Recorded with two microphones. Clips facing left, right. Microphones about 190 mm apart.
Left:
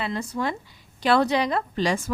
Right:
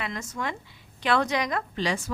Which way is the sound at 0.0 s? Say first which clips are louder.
Left 5 dB; 30° left (ahead or behind).